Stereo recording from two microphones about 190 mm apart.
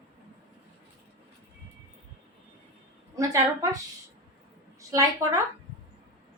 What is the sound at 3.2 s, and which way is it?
Speech, 20° right (ahead or behind).